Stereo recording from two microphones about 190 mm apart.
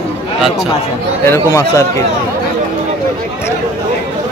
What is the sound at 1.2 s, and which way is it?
Speech, 15° left (ahead or behind).